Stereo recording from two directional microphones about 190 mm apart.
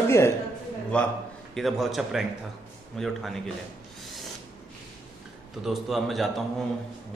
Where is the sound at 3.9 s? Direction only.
Centre (ahead or behind).